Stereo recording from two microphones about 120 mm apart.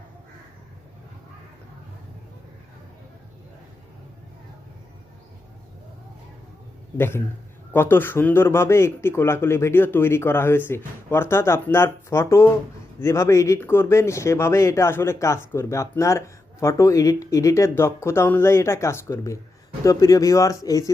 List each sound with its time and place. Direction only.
6.9 s speech: 20° left (ahead or behind)